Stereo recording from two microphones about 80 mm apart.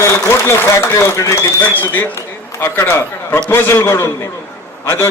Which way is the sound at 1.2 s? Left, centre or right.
Left.